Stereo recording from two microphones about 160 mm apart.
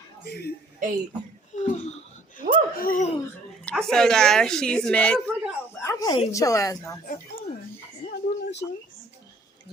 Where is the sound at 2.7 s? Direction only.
65° left (ahead or behind).